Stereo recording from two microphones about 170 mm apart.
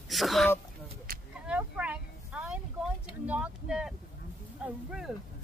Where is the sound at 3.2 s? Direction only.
10° right (ahead or behind).